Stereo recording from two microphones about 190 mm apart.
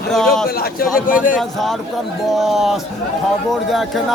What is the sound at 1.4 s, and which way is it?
Speech, centre (ahead or behind).